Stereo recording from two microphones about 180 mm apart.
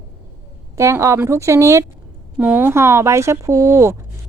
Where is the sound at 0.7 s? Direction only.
15° right (ahead or behind).